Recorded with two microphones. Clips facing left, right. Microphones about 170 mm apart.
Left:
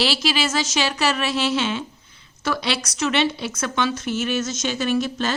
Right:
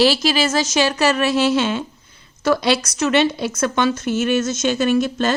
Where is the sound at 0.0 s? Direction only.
45° right (ahead or behind).